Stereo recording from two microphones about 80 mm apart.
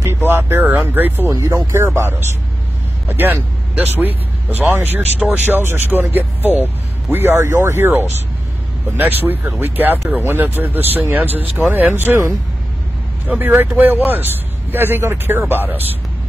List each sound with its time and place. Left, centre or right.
0.2 s speech: right
1.3 s speech: right
2.0 s speech: right
7.1 s speech: right
13.4 s speech: right